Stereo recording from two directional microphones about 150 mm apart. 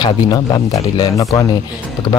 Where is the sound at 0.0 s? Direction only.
25° left (ahead or behind).